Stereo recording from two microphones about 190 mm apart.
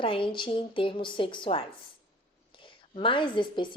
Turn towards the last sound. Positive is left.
turn(degrees=25)  # may be behind; listen again after turning